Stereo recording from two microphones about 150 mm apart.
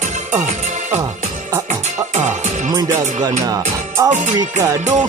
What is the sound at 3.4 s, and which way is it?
Speech, 25° right (ahead or behind).